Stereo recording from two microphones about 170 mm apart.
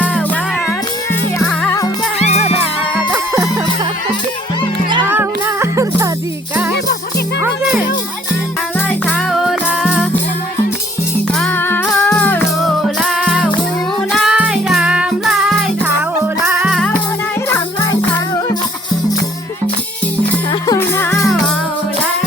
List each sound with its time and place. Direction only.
2.1 s music: 40° left (ahead or behind)
5.1 s music: 15° right (ahead or behind)
7.4 s music: 10° right (ahead or behind)
9.3 s music: centre (ahead or behind)
11.3 s music: 10° left (ahead or behind)
13.2 s music: 5° right (ahead or behind)
20.7 s music: 15° left (ahead or behind)